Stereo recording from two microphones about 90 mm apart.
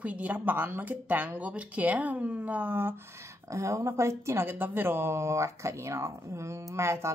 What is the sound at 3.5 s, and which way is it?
Speech, 35° right (ahead or behind).